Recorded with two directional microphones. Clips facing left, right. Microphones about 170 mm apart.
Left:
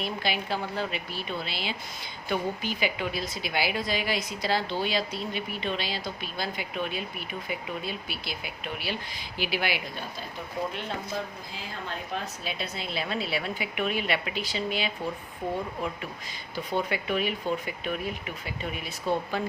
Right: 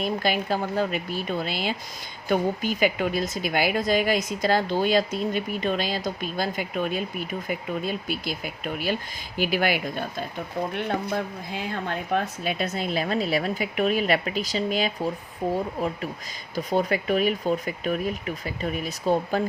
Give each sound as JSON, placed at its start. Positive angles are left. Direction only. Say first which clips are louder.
{"t": 0.0, "sound": "a woman's voice", "louder": "right 6 dB", "side_deg": -45}
{"t": 10.8, "sound": "a woman's voice", "louder": "right 6 dB", "side_deg": -60}
{"t": 16.6, "sound": "speech", "louder": "right 5 dB", "side_deg": -40}